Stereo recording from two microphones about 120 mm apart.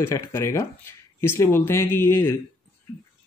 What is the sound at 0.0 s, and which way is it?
A man's voice, 20° left (ahead or behind).